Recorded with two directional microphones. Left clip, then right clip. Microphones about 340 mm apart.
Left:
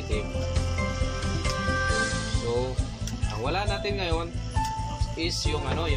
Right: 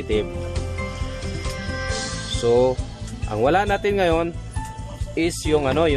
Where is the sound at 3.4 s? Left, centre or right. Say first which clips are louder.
Right 10 dB; right.